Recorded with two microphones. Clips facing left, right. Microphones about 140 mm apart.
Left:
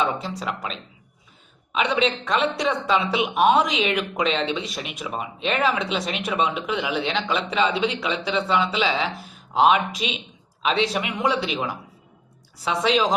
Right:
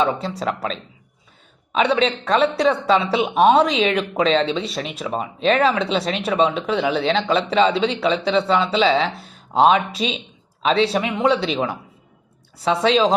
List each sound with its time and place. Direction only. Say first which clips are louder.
0.3 s a woman's voice: right 5 dB; 35° right (ahead or behind)